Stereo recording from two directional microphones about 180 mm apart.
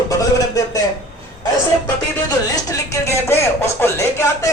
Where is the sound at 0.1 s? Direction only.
20° left (ahead or behind).